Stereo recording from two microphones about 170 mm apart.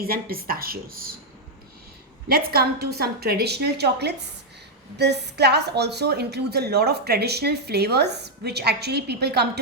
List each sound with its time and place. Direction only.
0.0 s speech: 60° right (ahead or behind)
2.3 s a woman's voice: 65° right (ahead or behind)